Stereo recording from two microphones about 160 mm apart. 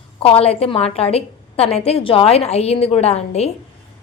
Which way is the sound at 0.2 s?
35° left (ahead or behind).